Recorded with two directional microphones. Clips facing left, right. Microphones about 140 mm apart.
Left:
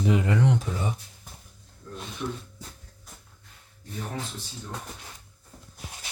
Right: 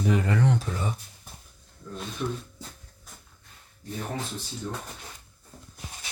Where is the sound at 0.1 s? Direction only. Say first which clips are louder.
Left 1 dB; 20° left (ahead or behind).